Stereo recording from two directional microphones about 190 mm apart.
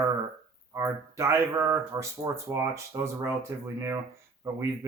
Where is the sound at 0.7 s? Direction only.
15° right (ahead or behind).